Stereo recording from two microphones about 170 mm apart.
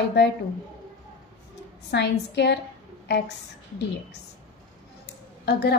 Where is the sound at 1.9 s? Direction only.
85° left.